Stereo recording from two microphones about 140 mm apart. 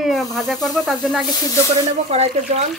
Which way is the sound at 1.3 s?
25° left (ahead or behind).